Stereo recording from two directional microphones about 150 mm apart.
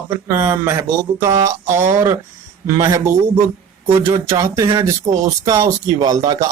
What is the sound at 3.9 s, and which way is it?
Speech, 35° right (ahead or behind).